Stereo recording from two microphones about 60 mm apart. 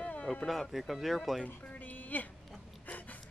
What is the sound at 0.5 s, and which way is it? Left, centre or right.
Speech, centre.